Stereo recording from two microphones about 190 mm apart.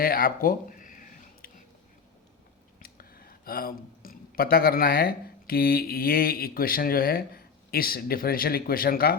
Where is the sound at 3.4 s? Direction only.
50° left (ahead or behind).